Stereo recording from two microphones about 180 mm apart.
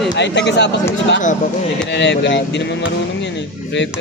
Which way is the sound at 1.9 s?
75° left (ahead or behind).